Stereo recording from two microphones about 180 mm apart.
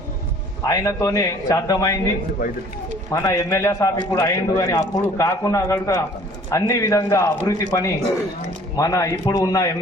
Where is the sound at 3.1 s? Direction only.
20° left (ahead or behind).